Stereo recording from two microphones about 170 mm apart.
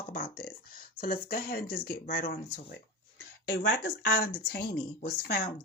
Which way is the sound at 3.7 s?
70° left (ahead or behind).